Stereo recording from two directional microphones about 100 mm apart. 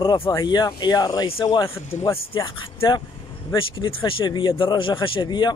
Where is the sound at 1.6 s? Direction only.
25° left (ahead or behind).